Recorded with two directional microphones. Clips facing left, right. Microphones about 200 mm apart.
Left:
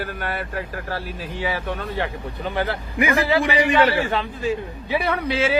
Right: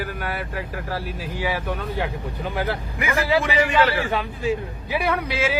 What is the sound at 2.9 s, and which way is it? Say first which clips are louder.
A man's voice: left 3 dB; 15° left (ahead or behind).